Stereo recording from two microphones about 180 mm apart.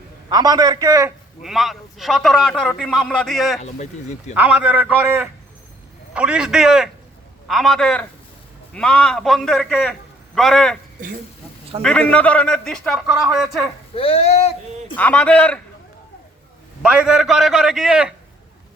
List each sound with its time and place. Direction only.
0.3 s a man's voice: 20° right (ahead or behind)
1.4 s a man's voice: centre (ahead or behind)
11.8 s a man's voice: 5° left (ahead or behind)
13.9 s speech: 30° left (ahead or behind)
14.9 s a man's voice: 10° left (ahead or behind)
16.8 s a man's voice: 5° right (ahead or behind)